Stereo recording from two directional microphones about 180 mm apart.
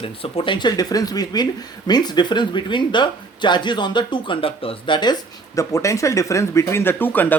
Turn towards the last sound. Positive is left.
turn(degrees=10)  # may be behind; listen again after turning